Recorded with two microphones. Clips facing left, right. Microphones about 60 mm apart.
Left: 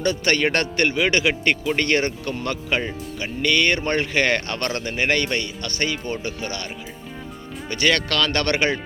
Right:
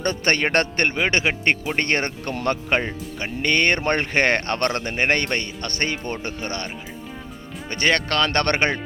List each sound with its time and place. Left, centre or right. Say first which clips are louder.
0.0 s speech: left 1 dB; right
7.7 s speech: even; right